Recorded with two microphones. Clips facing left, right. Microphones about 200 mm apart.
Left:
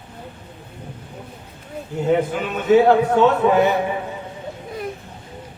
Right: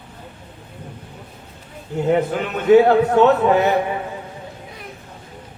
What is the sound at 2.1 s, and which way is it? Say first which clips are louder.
Speech: even; 50° right (ahead or behind).